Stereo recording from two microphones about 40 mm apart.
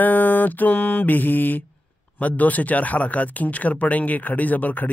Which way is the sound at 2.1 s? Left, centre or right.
Left.